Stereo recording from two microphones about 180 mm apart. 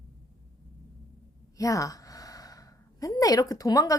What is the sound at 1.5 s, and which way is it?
A woman's voice, 20° left (ahead or behind).